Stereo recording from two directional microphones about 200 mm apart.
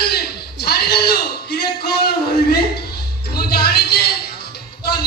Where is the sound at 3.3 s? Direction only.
50° left (ahead or behind).